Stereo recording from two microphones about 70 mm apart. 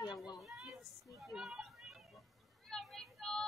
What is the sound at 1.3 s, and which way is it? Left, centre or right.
Children playing, centre.